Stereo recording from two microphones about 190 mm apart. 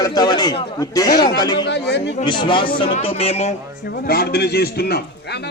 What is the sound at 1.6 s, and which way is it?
Speech, 60° left (ahead or behind).